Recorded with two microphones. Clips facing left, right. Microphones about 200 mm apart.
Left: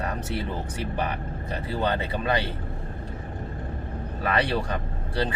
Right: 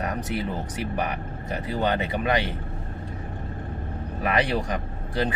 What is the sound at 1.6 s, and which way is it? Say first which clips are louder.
Speech: right 2 dB; 15° right (ahead or behind).